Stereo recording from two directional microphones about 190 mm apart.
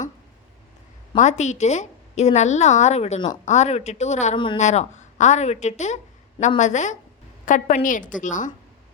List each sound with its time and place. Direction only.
1.1 s a woman's voice: 40° left (ahead or behind)